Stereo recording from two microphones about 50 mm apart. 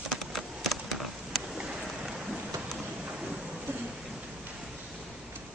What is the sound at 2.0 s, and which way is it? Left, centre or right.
Rain, centre.